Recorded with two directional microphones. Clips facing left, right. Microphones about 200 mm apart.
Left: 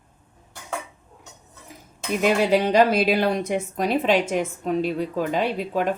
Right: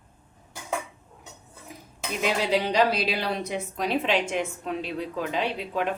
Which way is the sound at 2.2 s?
50° left (ahead or behind).